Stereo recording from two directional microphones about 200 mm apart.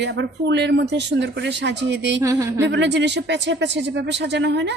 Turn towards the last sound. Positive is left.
turn(degrees=-60)  # may be behind; listen again after turning